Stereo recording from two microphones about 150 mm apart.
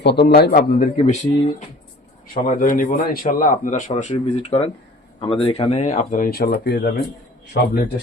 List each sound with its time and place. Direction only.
0.1 s a man's voice: 90° left
0.9 s speech: 50° left (ahead or behind)
2.4 s a man's voice: 65° left (ahead or behind)